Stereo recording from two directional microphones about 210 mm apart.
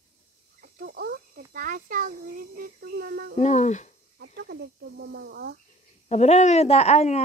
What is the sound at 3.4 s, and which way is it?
Speech, 35° left (ahead or behind).